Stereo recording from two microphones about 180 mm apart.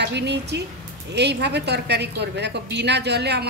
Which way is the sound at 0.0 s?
70° right (ahead or behind).